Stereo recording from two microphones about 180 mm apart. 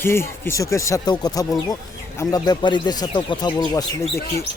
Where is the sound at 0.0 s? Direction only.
15° left (ahead or behind).